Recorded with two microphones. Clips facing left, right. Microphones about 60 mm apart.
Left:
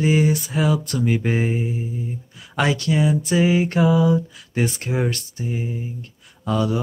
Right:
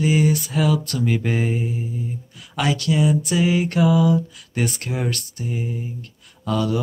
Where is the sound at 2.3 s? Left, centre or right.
Left.